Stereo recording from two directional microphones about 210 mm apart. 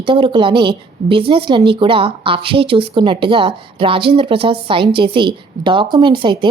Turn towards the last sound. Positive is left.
turn(degrees=-25)  # may be behind; listen again after turning